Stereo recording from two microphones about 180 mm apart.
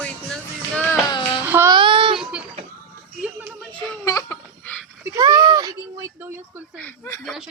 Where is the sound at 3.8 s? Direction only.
20° left (ahead or behind).